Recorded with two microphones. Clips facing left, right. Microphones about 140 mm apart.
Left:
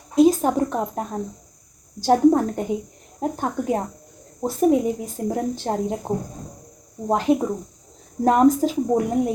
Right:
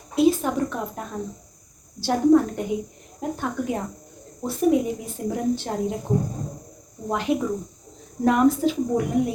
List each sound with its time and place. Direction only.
0.2 s a woman's voice: 40° left (ahead or behind)